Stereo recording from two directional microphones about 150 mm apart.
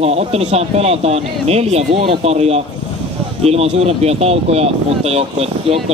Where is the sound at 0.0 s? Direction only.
45° right (ahead or behind).